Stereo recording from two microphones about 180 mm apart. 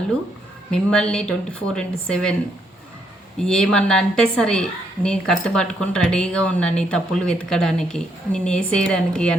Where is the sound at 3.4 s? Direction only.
5° left (ahead or behind).